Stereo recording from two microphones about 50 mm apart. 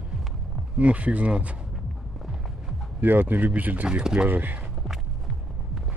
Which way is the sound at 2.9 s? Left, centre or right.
Right.